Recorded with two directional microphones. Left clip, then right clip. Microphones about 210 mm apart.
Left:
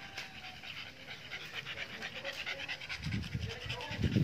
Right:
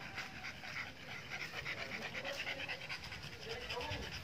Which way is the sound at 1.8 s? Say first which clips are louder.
Left 1 dB; 5° right (ahead or behind).